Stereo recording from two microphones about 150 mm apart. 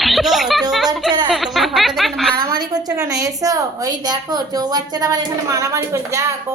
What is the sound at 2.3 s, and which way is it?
A woman's voice, 25° right (ahead or behind).